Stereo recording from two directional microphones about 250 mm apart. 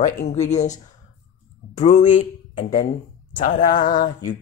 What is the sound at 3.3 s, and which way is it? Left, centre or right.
Speech, left.